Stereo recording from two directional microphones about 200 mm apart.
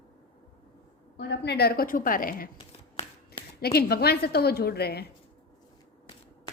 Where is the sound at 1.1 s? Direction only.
55° left (ahead or behind).